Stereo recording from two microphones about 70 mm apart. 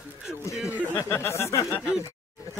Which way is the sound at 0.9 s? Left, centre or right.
Left.